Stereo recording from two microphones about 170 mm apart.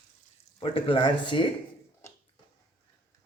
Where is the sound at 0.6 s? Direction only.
30° left (ahead or behind).